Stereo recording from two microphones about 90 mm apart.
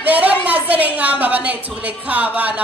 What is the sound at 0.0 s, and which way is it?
A woman's voice, 15° right (ahead or behind).